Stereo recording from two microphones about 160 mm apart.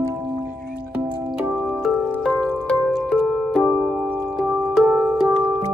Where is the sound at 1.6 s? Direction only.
Centre (ahead or behind).